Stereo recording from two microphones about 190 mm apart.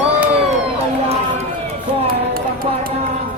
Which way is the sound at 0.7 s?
30° right (ahead or behind).